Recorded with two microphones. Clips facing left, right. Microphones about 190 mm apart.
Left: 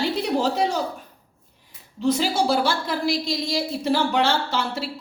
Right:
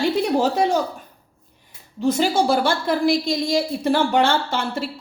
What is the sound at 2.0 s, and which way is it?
A woman's voice, 50° right (ahead or behind).